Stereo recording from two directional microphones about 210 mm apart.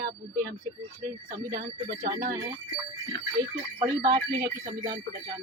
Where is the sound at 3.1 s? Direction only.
20° left (ahead or behind).